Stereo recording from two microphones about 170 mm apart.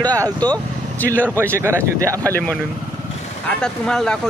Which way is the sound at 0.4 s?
10° left (ahead or behind).